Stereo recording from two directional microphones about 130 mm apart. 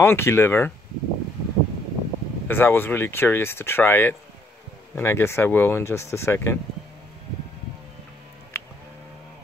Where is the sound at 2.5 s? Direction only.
15° left (ahead or behind).